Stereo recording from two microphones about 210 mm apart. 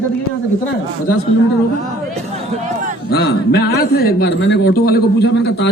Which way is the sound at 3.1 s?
50° left (ahead or behind).